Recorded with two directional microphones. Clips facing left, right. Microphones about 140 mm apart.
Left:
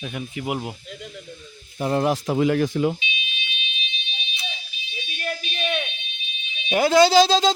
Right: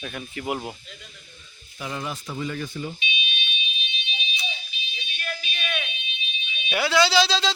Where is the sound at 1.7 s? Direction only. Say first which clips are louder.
Left 11 dB; 50° left (ahead or behind).